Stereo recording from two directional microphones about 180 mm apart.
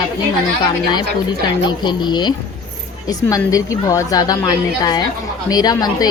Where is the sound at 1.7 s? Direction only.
25° left (ahead or behind).